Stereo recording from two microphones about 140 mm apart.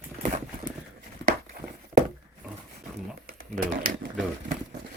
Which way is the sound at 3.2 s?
80° right.